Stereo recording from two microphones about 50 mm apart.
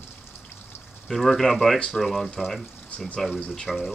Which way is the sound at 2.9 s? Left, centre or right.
Left.